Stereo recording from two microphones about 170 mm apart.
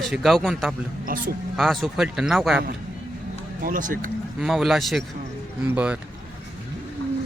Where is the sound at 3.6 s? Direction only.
50° right (ahead or behind).